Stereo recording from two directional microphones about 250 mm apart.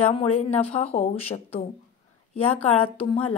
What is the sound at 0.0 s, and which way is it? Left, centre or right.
Speech, left.